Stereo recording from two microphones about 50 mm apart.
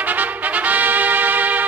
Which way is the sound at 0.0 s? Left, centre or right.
Right.